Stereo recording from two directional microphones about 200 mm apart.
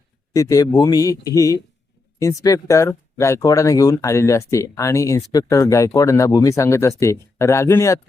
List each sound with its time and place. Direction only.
0.3 s speech: 15° left (ahead or behind)